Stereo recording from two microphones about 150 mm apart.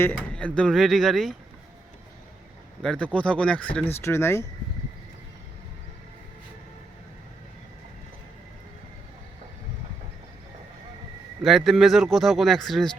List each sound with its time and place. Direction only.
0.0 s speech: 10° left (ahead or behind)
2.8 s speech: 5° left (ahead or behind)
11.4 s speech: centre (ahead or behind)